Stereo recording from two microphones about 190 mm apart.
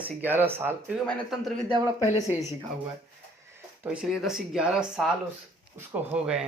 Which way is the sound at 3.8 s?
5° right (ahead or behind).